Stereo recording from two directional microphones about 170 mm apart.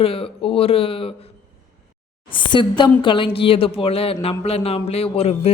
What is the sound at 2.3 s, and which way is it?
A man's voice, 30° left (ahead or behind).